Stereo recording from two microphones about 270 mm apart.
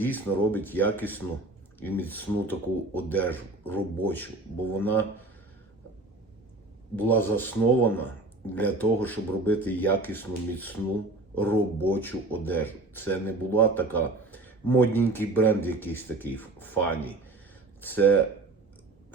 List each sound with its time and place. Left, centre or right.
0.0 s speech: centre
6.9 s speech: centre